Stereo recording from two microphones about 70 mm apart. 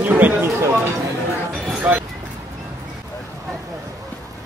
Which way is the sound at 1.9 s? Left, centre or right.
Centre.